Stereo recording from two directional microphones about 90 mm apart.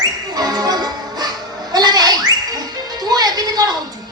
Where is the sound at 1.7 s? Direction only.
50° right (ahead or behind).